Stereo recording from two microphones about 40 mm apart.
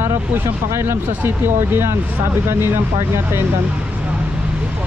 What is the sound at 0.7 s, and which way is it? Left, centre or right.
Speech, right.